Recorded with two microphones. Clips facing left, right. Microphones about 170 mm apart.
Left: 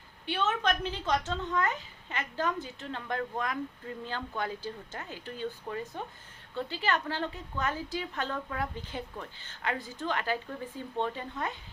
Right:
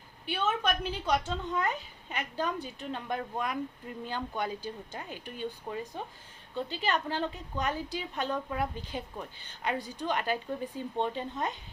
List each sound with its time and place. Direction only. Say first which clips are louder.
0.3 s a woman's voice: left 1 dB; 10° right (ahead or behind)